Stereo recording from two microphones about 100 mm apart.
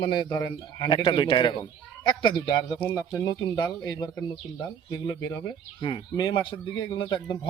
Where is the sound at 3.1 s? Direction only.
35° left (ahead or behind).